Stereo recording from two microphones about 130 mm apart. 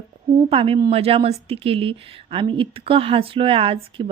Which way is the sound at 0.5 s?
45° right (ahead or behind).